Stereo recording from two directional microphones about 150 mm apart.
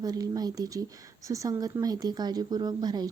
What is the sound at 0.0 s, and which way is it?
Speech, 25° right (ahead or behind).